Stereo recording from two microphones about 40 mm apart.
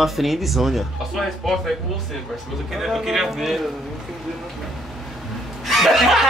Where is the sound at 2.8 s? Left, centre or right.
Centre.